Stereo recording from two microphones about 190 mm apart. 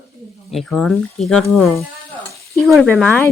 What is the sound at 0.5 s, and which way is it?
Speech, centre (ahead or behind).